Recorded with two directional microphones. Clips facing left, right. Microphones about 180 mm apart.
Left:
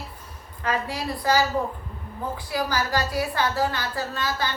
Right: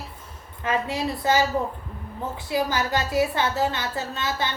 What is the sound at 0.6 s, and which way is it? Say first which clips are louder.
Speech: right 2 dB; 20° right (ahead or behind).